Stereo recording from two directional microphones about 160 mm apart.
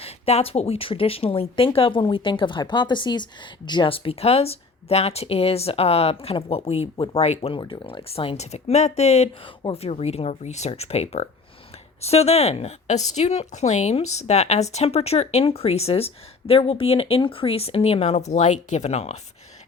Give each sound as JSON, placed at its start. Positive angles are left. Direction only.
{"t": 0.0, "sound": "speech", "side_deg": 40}
{"t": 7.6, "sound": "speech", "side_deg": 30}